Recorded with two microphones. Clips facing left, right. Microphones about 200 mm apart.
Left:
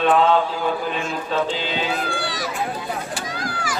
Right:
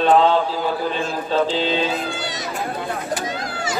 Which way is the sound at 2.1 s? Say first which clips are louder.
Left 1 dB; 20° right (ahead or behind).